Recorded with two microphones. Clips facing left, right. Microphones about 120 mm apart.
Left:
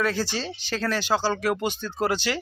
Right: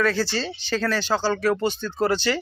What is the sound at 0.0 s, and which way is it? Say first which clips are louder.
Speech: right 3 dB; 10° left (ahead or behind).